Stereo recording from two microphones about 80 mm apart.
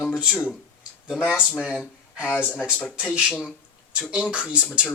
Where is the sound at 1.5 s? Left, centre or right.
Centre.